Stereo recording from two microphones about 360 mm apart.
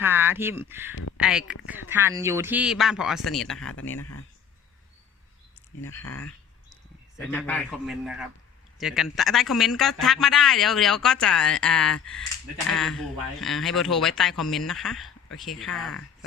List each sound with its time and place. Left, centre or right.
0.0 s a man's voice: centre
3.8 s speech: left
7.2 s a man's voice: centre